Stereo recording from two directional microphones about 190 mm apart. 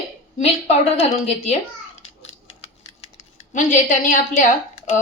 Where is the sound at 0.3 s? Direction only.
35° left (ahead or behind).